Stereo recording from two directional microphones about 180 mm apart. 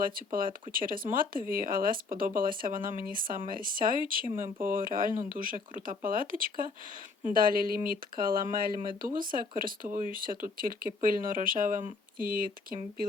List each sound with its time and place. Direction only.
0.0 s speech: 50° right (ahead or behind)